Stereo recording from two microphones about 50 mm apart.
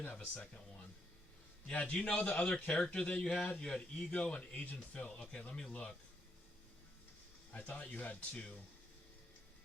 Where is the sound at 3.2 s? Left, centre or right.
Centre.